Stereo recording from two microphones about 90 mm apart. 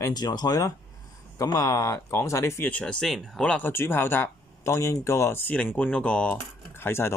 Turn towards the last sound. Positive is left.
turn(degrees=25)  # may be behind; listen again after turning